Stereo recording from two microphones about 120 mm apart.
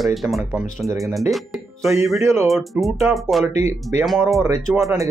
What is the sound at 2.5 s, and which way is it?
Speech, centre (ahead or behind).